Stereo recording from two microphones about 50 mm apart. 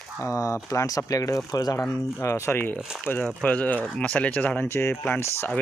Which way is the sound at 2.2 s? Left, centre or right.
Left.